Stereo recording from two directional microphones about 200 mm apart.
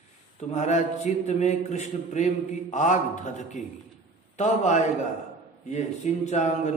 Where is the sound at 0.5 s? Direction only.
35° left (ahead or behind).